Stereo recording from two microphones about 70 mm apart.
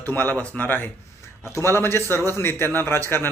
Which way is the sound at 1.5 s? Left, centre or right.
Left.